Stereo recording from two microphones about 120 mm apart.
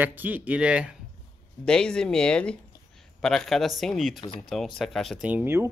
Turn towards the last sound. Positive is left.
turn(degrees=-20)  # may be behind; listen again after turning